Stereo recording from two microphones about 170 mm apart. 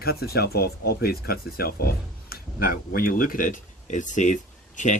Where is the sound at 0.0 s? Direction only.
65° left (ahead or behind).